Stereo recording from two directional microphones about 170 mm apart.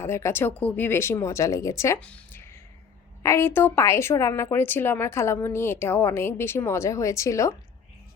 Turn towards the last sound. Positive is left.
turn(degrees=20)  # may be behind; listen again after turning